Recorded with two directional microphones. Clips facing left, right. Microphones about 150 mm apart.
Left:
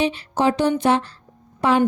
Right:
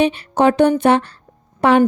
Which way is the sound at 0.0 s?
60° right (ahead or behind).